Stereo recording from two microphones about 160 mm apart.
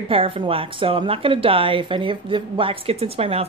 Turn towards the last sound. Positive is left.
turn(degrees=-40)  # may be behind; listen again after turning